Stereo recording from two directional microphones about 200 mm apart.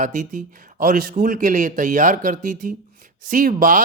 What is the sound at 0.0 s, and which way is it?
A man's voice, 40° right (ahead or behind).